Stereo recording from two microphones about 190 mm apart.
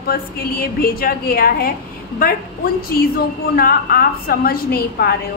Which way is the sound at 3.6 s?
50° left (ahead or behind).